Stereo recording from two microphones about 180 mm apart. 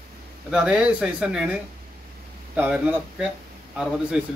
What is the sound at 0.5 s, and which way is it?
A man's voice, 5° right (ahead or behind).